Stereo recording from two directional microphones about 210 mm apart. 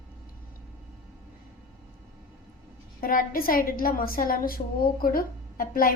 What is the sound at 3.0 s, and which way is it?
A woman's voice, 45° left (ahead or behind).